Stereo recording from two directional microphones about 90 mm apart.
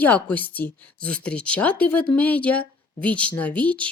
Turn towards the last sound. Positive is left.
turn(degrees=15)  # may be behind; listen again after turning